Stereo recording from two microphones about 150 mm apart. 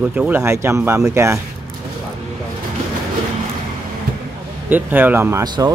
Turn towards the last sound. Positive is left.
turn(degrees=-30)  # may be behind; listen again after turning